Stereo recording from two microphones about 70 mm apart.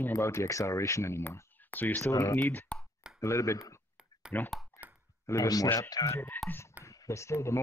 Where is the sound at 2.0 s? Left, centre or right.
Left.